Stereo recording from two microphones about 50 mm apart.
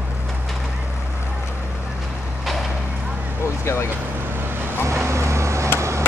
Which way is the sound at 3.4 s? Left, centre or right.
Left.